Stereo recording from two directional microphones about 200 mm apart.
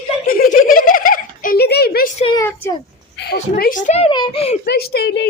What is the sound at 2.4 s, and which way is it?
Speech, 10° left (ahead or behind).